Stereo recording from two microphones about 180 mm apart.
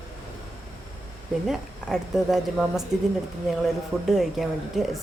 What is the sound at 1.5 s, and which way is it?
A woman's voice, centre (ahead or behind).